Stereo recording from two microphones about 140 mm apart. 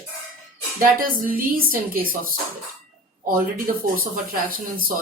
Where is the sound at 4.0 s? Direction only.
90° right.